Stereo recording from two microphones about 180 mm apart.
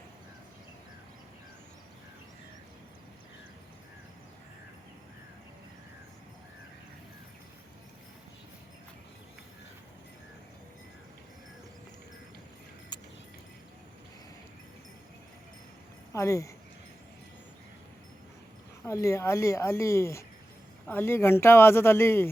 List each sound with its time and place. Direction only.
12.9 s keys jangling: 25° left (ahead or behind)
16.1 s a woman's voice: 15° left (ahead or behind)
18.8 s a woman's voice: 15° left (ahead or behind)